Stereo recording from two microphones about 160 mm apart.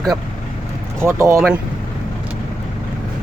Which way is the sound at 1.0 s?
15° right (ahead or behind).